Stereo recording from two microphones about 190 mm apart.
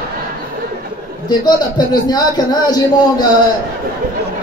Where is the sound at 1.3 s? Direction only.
20° left (ahead or behind).